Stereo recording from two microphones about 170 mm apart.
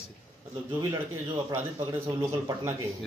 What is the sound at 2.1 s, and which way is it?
Speech, 15° right (ahead or behind).